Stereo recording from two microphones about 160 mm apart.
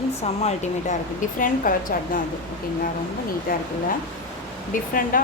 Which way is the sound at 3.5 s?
65° left (ahead or behind).